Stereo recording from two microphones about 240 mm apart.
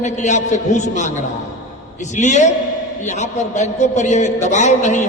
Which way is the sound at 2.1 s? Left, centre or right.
Left.